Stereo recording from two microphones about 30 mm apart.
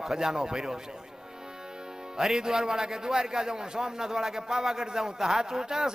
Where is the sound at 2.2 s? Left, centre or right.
Centre.